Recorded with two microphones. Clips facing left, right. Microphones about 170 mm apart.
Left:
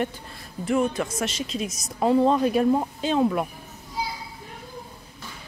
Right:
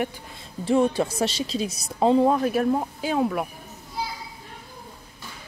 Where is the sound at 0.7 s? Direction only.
30° right (ahead or behind).